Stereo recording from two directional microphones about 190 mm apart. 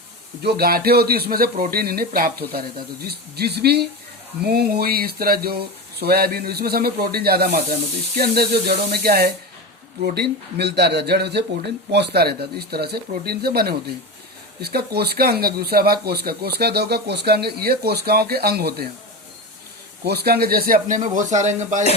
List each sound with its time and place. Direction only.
0.4 s speech: 55° right (ahead or behind)
20.1 s speech: 55° right (ahead or behind); by 21.8 s 40° right (ahead or behind)